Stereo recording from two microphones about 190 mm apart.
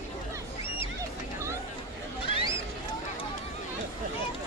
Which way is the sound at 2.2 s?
25° left (ahead or behind).